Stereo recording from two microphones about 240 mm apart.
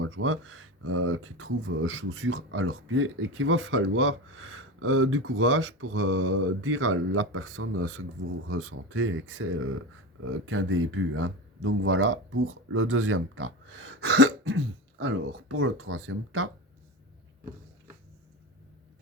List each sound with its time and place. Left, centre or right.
0.0 s speech: right